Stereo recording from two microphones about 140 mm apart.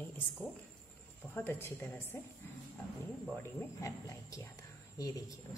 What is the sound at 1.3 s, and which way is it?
Speech, 15° left (ahead or behind).